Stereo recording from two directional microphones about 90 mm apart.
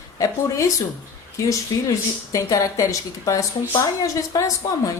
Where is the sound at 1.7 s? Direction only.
45° left (ahead or behind).